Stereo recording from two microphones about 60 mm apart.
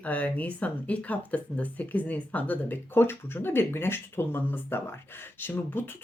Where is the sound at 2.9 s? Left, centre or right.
Left.